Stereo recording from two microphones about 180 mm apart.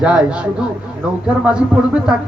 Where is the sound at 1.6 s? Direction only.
5° right (ahead or behind).